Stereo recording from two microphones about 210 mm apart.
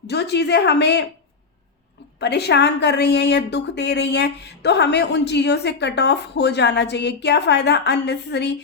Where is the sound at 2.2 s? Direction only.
50° left (ahead or behind).